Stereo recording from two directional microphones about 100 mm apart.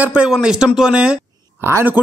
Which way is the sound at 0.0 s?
10° right (ahead or behind).